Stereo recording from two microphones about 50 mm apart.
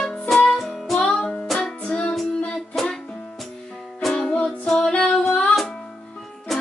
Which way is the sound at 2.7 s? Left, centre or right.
Centre.